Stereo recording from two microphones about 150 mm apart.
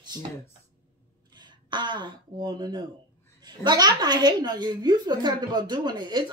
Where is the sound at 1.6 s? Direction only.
30° right (ahead or behind).